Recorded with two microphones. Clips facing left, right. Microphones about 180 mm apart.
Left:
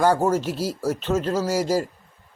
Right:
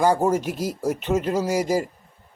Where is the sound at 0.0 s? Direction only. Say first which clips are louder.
Even; 15° right (ahead or behind).